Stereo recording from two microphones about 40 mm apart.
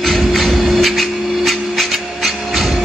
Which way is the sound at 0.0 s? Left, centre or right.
Centre.